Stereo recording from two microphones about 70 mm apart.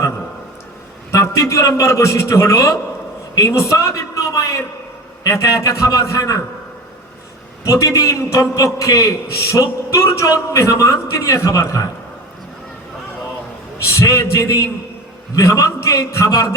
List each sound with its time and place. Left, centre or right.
1.1 s a man's voice: left
7.6 s a man's voice: left
13.8 s a man's voice: left